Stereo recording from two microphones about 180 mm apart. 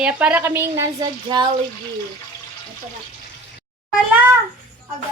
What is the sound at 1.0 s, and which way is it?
Speech, 25° right (ahead or behind).